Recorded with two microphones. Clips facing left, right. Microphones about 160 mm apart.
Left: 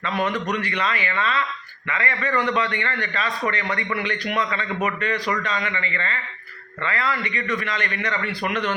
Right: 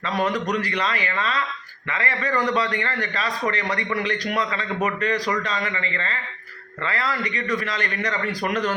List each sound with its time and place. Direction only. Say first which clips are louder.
0.1 s a man's voice: right 1 dB; 35° right (ahead or behind)